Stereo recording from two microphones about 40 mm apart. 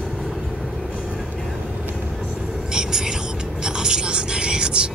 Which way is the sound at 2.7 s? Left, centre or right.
Centre.